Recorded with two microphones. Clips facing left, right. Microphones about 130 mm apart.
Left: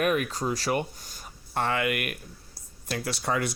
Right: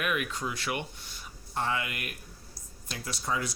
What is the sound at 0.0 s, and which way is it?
Speech, 40° left (ahead or behind).